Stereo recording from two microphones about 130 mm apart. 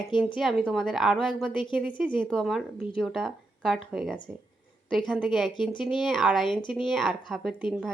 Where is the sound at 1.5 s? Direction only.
40° left (ahead or behind).